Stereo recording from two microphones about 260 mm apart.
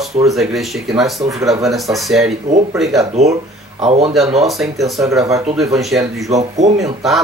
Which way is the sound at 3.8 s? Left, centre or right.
Right.